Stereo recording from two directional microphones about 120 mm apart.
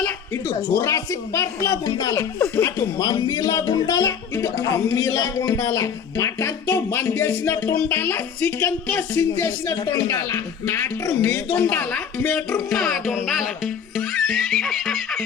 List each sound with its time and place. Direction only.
0.7 s speech: 25° left (ahead or behind)
2.4 s speech: 15° left (ahead or behind)
3.0 s speech: 35° left (ahead or behind); by 13.4 s centre (ahead or behind)
14.3 s neigh: centre (ahead or behind)